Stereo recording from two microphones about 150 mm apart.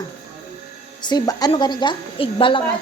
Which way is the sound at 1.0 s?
25° left (ahead or behind).